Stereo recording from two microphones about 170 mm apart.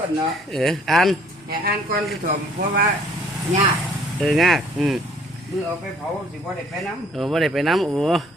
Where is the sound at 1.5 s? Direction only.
65° right (ahead or behind).